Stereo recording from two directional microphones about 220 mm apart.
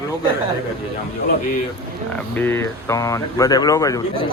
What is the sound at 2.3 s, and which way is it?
Speech, 10° left (ahead or behind).